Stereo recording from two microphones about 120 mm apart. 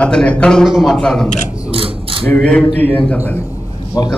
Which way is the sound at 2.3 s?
15° left (ahead or behind).